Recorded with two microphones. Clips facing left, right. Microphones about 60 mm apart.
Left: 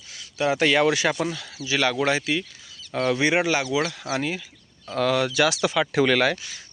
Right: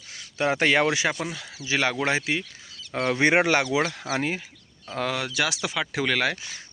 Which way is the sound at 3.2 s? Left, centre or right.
Right.